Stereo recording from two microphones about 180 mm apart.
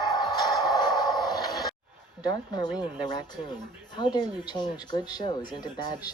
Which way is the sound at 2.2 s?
20° left (ahead or behind).